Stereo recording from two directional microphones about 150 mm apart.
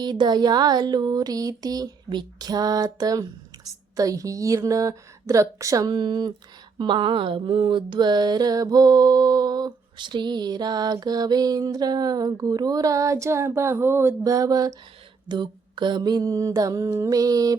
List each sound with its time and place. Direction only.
0.0 s music: 30° right (ahead or behind)